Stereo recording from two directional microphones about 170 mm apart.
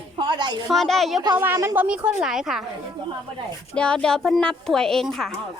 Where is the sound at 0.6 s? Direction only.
Centre (ahead or behind).